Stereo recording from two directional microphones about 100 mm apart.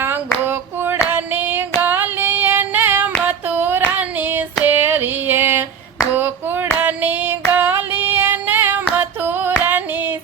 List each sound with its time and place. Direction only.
0.4 s clapping: 20° right (ahead or behind)
1.1 s female singing: 20° right (ahead or behind)
3.2 s child singing: 15° right (ahead or behind)
4.6 s a sound: 20° right (ahead or behind)
6.1 s clapping: 20° right (ahead or behind)
6.7 s female singing: 15° right (ahead or behind)